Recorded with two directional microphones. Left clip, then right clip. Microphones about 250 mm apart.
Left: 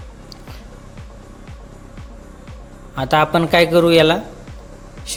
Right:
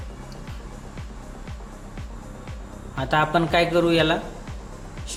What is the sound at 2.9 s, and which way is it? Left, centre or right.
Speech, left.